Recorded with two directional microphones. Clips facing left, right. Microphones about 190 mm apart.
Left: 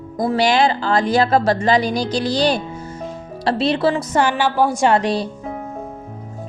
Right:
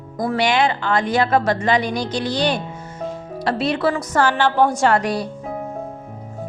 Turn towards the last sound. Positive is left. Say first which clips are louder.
# left 2 dB
turn(degrees=25)  # may be behind; listen again after turning